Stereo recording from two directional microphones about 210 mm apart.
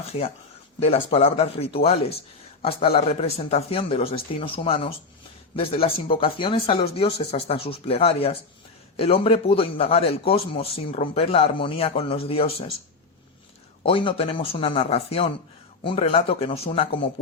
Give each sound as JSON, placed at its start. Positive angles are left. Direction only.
{"t": 0.8, "sound": "speech", "side_deg": 30}
{"t": 13.8, "sound": "speech", "side_deg": 25}